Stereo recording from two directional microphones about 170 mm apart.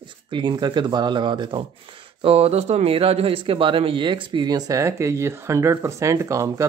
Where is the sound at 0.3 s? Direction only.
25° right (ahead or behind).